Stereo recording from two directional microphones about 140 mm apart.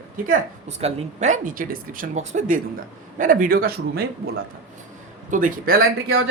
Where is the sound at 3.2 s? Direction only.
75° right (ahead or behind); by 4.0 s 90° right.